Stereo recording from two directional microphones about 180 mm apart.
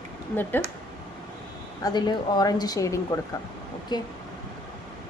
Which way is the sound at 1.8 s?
25° left (ahead or behind).